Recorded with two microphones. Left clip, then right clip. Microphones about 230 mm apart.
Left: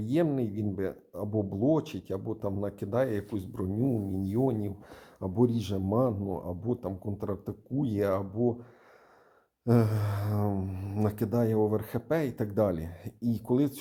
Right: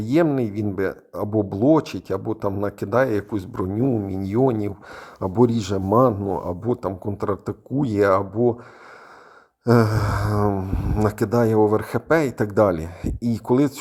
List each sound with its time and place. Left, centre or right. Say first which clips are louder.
0.0 s speech: right 9 dB; right
9.6 s speech: right 10 dB; right